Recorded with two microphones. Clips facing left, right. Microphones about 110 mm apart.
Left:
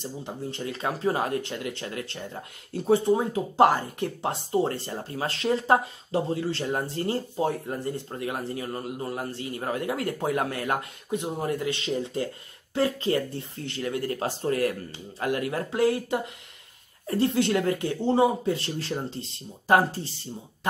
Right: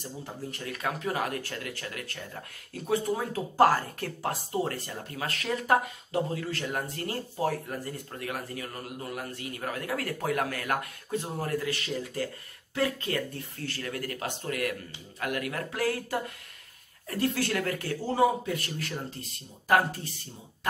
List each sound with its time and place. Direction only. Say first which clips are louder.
0.0 s speech: left 4 dB; 25° left (ahead or behind)